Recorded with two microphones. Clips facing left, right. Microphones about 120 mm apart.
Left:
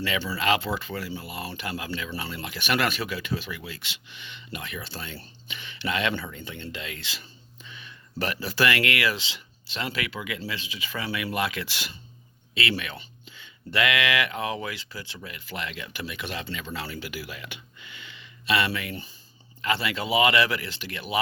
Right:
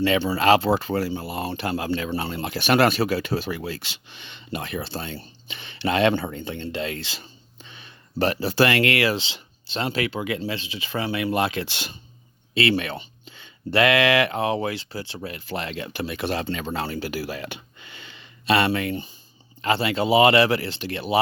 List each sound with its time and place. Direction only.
0.2 s speech: 40° right (ahead or behind)